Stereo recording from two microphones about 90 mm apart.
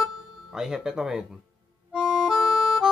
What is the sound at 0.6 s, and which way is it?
Speech, 5° right (ahead or behind).